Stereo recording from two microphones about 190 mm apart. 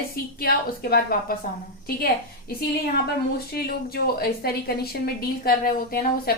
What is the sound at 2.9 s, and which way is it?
A woman's voice, 55° left (ahead or behind).